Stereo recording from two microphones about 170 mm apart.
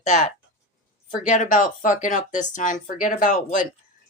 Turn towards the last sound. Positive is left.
turn(degrees=50)  # may be behind; listen again after turning